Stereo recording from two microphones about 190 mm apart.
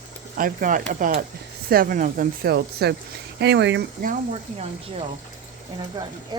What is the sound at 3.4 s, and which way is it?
Speech, 65° right (ahead or behind).